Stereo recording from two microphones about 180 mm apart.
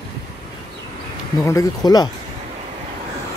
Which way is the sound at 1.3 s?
20° left (ahead or behind).